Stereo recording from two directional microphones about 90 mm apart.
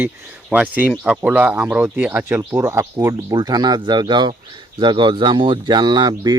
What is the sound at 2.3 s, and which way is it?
Speech, 30° right (ahead or behind).